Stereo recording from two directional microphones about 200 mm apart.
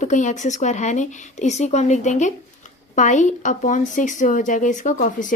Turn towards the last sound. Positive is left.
turn(degrees=40)  # may be behind; listen again after turning